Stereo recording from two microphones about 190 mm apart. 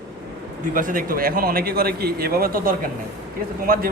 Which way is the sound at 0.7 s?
45° right (ahead or behind).